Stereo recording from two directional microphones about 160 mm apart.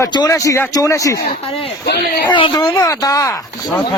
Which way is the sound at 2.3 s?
30° left (ahead or behind).